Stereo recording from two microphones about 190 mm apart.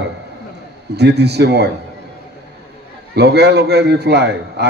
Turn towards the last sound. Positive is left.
turn(degrees=-60)  # may be behind; listen again after turning